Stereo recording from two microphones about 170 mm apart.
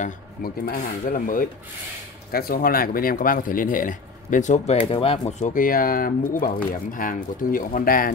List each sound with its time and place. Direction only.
0.0 s speech: 60° left (ahead or behind)
4.7 s speech: 35° left (ahead or behind)
5.4 s speech: 55° left (ahead or behind)